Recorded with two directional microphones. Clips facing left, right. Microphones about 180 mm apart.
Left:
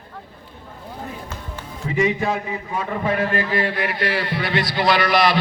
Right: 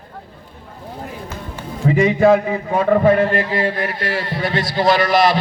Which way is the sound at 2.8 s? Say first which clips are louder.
Right 11 dB; 45° right (ahead or behind).